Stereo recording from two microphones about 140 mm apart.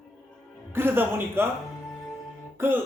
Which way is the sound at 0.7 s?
15° right (ahead or behind).